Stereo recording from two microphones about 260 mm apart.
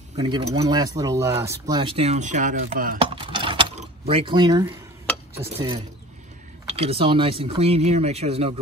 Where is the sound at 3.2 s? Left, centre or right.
Centre.